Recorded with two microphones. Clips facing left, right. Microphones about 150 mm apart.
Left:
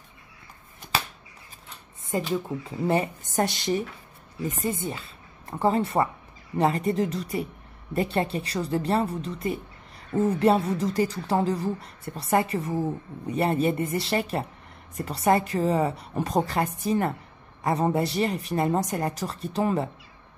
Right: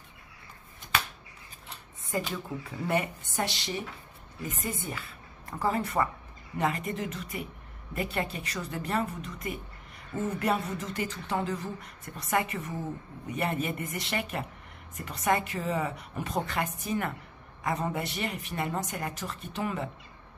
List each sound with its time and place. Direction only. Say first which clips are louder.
2.1 s a woman's voice: left 6 dB; 25° left (ahead or behind)
3.3 s speech: left 8 dB; 45° left (ahead or behind)
4.5 s a woman's voice: left 6 dB; 30° left (ahead or behind)